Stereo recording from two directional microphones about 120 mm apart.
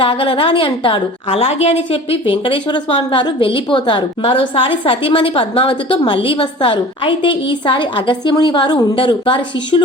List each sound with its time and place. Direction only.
0.0 s a woman's voice: 45° left (ahead or behind)